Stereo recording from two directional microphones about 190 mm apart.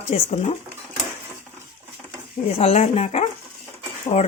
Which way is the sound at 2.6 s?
35° left (ahead or behind).